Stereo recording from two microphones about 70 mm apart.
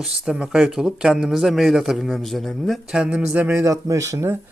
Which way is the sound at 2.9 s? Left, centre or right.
Centre.